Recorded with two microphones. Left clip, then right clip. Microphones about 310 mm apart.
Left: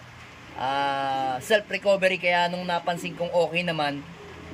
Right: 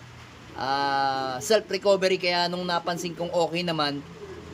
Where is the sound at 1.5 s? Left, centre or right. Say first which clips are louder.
Right 1 dB; centre.